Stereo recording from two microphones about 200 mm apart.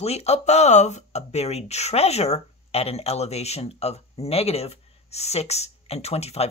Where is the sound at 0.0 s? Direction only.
30° left (ahead or behind).